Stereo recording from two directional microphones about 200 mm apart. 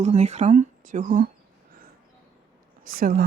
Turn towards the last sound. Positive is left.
turn(degrees=-45)  # may be behind; listen again after turning